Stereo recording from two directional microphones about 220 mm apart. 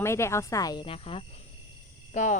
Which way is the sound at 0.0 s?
10° left (ahead or behind).